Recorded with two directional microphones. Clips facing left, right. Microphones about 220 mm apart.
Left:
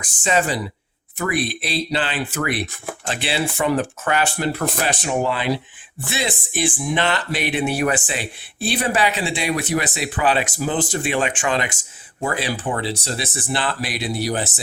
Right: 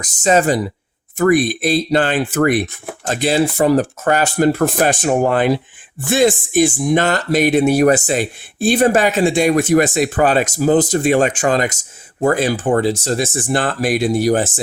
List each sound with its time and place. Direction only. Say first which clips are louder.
0.0 s speech: right 7 dB; 40° right (ahead or behind)